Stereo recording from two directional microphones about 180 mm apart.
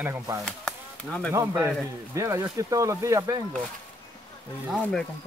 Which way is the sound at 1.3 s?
15° right (ahead or behind).